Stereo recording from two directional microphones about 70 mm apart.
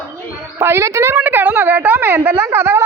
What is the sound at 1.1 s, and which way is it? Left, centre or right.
A woman's voice, right.